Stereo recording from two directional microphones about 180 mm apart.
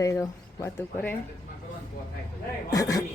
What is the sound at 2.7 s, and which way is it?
Speech, 20° left (ahead or behind).